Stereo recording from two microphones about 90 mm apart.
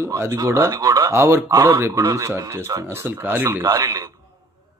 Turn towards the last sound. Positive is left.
turn(degrees=-40)  # may be behind; listen again after turning